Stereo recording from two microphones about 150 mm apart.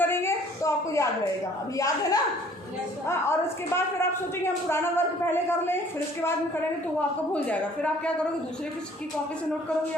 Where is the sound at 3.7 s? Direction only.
15° left (ahead or behind).